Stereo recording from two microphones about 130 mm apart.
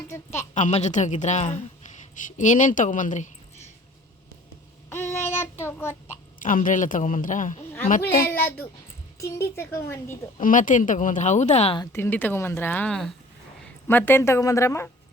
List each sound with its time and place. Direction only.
0.1 s speech: 20° left (ahead or behind)
0.5 s a woman's voice: 65° left (ahead or behind)
2.2 s speech: 75° left (ahead or behind)
4.9 s a sound: 20° left (ahead or behind)
6.4 s a man's voice: 90° left
8.3 s a woman's voice: 15° left (ahead or behind)
10.4 s speech: 85° left; by 11.8 s 55° left (ahead or behind)
11.9 s speech: 15° left (ahead or behind)
13.8 s a woman's voice: 15° left (ahead or behind)